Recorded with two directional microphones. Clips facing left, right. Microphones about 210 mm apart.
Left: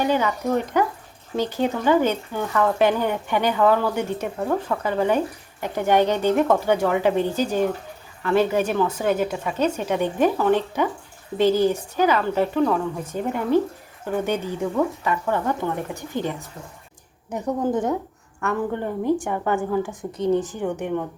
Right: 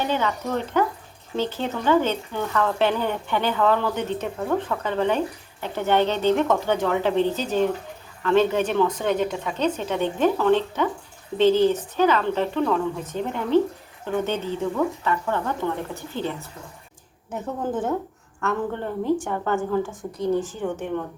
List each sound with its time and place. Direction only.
0.0 s speech: 10° left (ahead or behind)
17.3 s a woman's voice: 15° left (ahead or behind)
20.1 s speech: 20° left (ahead or behind)